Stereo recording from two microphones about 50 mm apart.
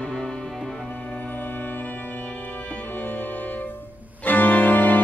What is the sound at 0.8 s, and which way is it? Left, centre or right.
Music, left.